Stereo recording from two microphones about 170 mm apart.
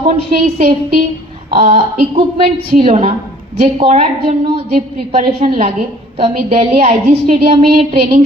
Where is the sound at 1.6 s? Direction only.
35° right (ahead or behind).